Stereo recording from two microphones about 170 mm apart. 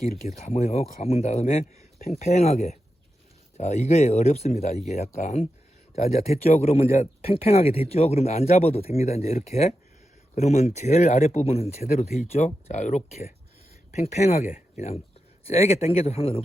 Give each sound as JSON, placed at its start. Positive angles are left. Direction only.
{"t": 0.3, "sound": "speech", "side_deg": 40}